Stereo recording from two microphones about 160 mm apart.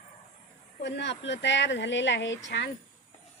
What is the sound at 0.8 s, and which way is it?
Speech, 90° left.